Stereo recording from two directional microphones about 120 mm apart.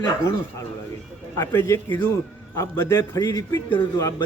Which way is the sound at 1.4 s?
25° left (ahead or behind).